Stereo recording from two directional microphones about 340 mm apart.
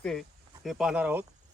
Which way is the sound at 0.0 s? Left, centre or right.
Centre.